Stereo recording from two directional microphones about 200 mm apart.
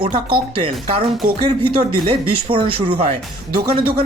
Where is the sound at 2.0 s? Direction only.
25° right (ahead or behind).